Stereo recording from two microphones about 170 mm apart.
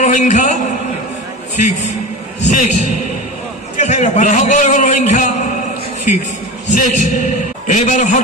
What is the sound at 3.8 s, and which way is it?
A man's voice, 45° left (ahead or behind).